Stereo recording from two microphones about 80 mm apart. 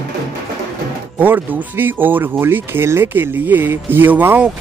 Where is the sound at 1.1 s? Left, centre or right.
Right.